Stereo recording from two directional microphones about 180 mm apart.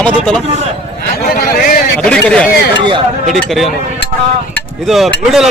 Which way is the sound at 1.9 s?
5° left (ahead or behind).